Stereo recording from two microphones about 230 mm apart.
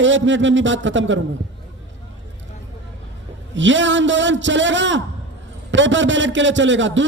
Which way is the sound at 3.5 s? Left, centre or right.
Right.